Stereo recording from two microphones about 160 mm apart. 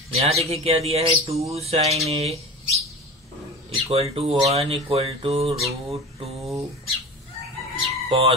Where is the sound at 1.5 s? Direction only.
40° right (ahead or behind).